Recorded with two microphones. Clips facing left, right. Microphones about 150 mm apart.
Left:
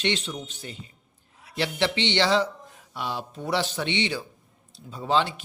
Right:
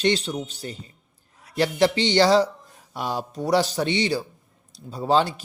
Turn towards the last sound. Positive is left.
turn(degrees=-40)  # may be behind; listen again after turning